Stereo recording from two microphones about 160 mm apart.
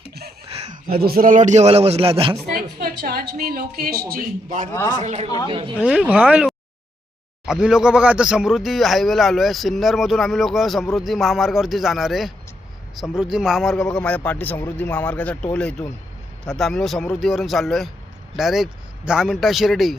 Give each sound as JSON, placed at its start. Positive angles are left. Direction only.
{"t": 0.5, "sound": "a sound", "side_deg": -40}
{"t": 0.9, "sound": "a man's voice", "side_deg": -70}
{"t": 3.0, "sound": "music", "side_deg": -70}
{"t": 3.4, "sound": "speech", "side_deg": -70}
{"t": 4.7, "sound": "speech", "side_deg": 20}
{"t": 5.0, "sound": "a woman's voice", "side_deg": -40}
{"t": 5.8, "sound": "speech", "side_deg": -5}
{"t": 16.5, "sound": "speech", "side_deg": 0}